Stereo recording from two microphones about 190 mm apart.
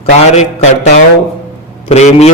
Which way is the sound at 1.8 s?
35° left (ahead or behind).